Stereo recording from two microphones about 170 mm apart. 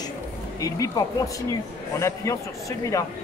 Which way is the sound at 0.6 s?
20° left (ahead or behind).